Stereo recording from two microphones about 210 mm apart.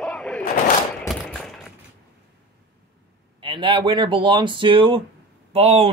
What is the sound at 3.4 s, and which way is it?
Speech, 25° right (ahead or behind).